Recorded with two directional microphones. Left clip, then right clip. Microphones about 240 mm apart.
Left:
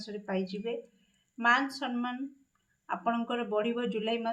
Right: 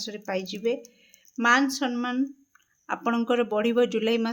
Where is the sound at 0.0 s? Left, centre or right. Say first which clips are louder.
Right 5 dB; right.